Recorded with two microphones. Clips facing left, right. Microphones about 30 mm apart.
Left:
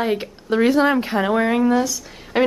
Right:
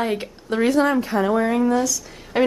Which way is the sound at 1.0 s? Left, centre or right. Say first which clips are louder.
Left 1 dB; left.